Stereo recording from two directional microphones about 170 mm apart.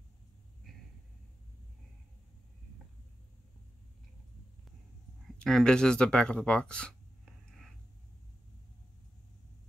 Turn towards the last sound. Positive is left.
turn(degrees=0)  # may be behind; listen again after turning